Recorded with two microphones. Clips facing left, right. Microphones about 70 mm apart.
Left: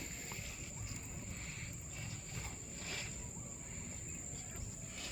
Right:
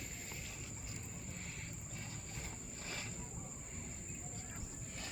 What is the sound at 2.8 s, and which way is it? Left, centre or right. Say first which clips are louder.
Wild animals: even; right.